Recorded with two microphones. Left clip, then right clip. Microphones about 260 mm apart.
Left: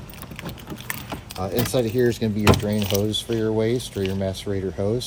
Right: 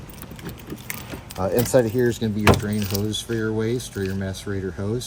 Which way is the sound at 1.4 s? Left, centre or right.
Right.